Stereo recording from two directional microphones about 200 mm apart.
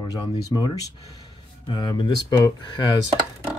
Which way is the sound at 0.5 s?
20° left (ahead or behind).